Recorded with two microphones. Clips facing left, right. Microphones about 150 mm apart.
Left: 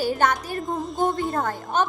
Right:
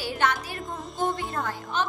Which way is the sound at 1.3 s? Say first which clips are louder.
Left 5 dB; 50° left (ahead or behind).